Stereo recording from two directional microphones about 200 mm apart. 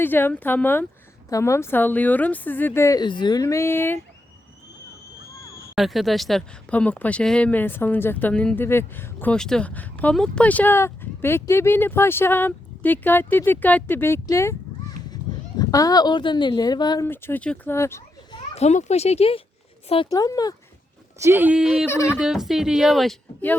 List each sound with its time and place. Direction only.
0.0 s speech: 10° left (ahead or behind)
5.7 s speech: centre (ahead or behind)
18.5 s speech: 35° left (ahead or behind); by 20.6 s 20° left (ahead or behind)
21.2 s a woman's voice: 10° right (ahead or behind); by 23.6 s 5° left (ahead or behind)